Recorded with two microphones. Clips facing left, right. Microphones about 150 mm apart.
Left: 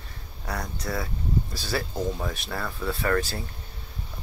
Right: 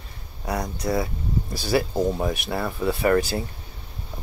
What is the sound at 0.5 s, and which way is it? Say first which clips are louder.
Speech: right 6 dB; 15° right (ahead or behind).